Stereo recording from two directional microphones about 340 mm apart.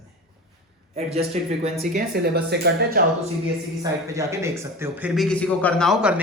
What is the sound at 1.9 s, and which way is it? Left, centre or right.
Speech, right.